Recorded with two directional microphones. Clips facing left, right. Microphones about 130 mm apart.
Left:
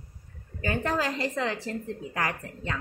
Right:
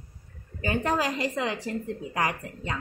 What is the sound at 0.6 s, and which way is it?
A woman's voice, 15° right (ahead or behind).